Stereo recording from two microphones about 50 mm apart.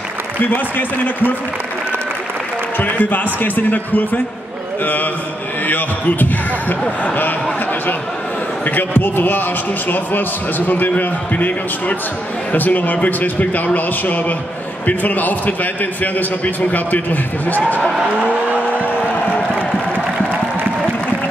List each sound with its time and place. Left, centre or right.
0.4 s a man's voice: left
2.8 s a man's voice: left
8.6 s a man's voice: left
12.5 s a man's voice: left
18.2 s vehicle: right